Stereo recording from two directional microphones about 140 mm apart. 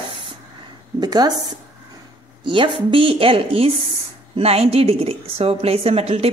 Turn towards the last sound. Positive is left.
turn(degrees=-45)  # may be behind; listen again after turning